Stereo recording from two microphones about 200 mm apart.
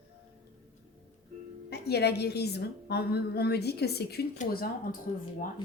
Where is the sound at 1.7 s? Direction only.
55° left (ahead or behind).